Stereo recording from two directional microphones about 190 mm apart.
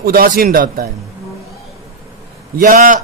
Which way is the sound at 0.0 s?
50° right (ahead or behind).